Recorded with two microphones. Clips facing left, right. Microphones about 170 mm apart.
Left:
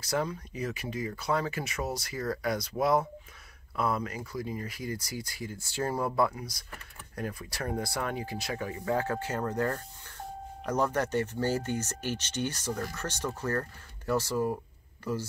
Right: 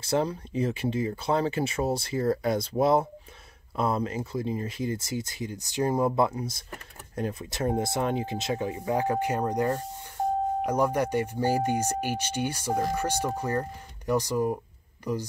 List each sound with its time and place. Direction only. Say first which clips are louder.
0.0 s speech: right 5 dB; 25° right (ahead or behind)